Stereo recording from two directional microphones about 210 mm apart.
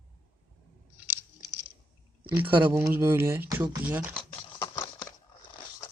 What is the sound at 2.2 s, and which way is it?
Speech, 10° right (ahead or behind).